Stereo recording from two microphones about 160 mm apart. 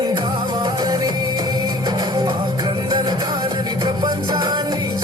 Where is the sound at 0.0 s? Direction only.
25° right (ahead or behind).